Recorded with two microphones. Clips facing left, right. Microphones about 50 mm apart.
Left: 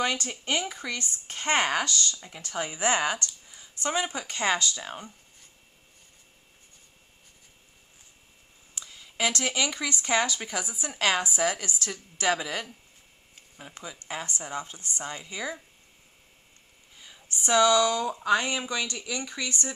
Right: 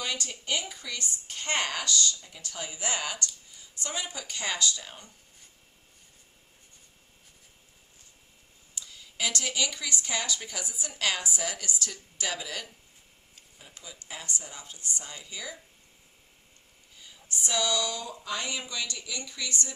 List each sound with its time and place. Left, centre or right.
0.0 s speech: left
8.7 s speech: left
17.4 s speech: left